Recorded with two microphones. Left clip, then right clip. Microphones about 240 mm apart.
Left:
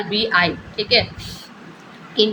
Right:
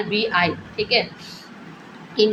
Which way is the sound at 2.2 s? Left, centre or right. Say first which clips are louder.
Left 1 dB; centre.